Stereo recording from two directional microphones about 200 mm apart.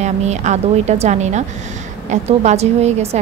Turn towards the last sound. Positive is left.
turn(degrees=-35)  # may be behind; listen again after turning